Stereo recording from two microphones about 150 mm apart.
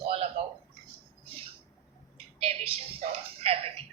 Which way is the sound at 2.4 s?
40° right (ahead or behind).